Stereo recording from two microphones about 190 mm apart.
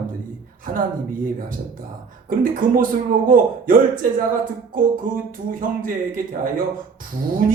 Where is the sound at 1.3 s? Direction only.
45° right (ahead or behind).